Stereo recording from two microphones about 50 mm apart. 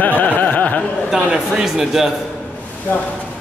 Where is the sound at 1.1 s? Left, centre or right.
Centre.